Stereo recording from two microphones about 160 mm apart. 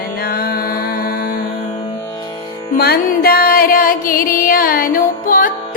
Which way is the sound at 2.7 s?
75° left (ahead or behind).